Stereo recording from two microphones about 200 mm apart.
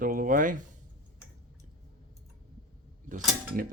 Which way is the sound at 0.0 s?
45° right (ahead or behind).